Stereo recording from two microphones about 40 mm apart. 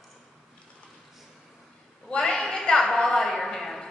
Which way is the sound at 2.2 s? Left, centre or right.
Centre.